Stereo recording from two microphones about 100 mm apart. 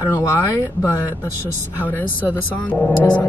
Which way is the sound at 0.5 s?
20° left (ahead or behind).